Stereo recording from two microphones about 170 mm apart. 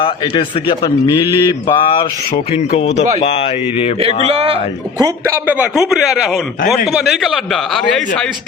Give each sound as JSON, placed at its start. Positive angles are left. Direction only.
{"t": 0.0, "sound": "speech", "side_deg": 30}
{"t": 4.0, "sound": "speech", "side_deg": -35}
{"t": 4.9, "sound": "a man's voice", "side_deg": -20}